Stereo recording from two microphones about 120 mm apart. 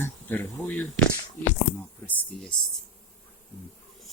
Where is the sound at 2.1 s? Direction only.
15° left (ahead or behind).